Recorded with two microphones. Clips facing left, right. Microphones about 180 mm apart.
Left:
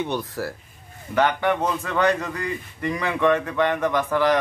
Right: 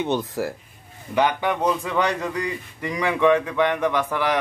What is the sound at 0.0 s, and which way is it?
A man's voice, 20° right (ahead or behind).